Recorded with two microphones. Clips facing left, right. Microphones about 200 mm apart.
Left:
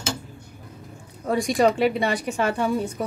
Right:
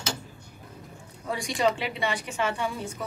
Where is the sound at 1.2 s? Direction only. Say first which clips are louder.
Left 6 dB; 50° left (ahead or behind).